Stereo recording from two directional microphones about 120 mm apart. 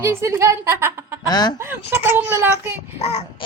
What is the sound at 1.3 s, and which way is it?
Speech, 35° left (ahead or behind).